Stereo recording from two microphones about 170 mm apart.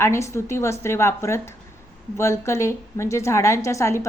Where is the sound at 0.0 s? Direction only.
15° left (ahead or behind).